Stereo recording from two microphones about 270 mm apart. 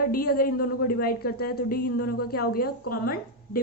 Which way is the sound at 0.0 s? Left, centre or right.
Left.